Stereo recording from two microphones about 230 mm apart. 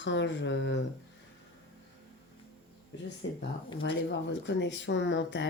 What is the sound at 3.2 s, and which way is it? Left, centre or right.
Speech, left.